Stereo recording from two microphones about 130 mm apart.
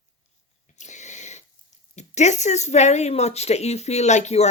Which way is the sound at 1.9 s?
60° left (ahead or behind).